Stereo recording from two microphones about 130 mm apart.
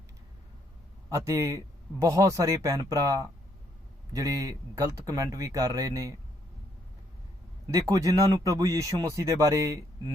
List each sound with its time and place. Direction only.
1.1 s speech: 20° right (ahead or behind)
7.7 s speech: 30° right (ahead or behind)